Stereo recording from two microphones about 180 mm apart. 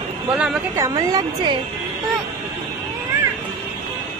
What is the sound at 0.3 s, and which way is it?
Speech, 5° right (ahead or behind).